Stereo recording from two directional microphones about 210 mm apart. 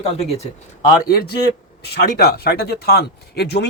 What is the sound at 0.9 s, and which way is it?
Speech, 45° left (ahead or behind).